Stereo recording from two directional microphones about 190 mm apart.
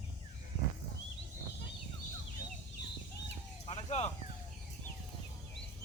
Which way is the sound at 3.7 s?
35° left (ahead or behind).